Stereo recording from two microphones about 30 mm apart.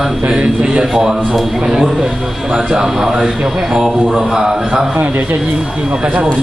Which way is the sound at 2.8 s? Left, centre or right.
Centre.